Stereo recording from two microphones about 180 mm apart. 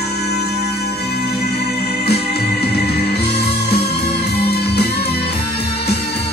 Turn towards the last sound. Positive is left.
turn(degrees=60)  # may be behind; listen again after turning